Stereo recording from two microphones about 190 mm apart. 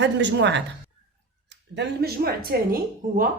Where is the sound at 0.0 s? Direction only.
65° right (ahead or behind).